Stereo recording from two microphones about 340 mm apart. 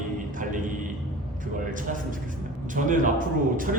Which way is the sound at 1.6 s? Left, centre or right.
Right.